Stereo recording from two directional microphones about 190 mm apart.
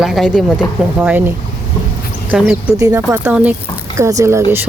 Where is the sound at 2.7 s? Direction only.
15° right (ahead or behind).